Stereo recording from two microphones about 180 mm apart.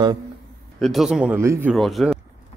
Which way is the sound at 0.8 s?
Centre (ahead or behind).